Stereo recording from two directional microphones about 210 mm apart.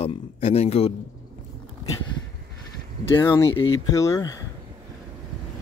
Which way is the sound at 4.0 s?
15° left (ahead or behind).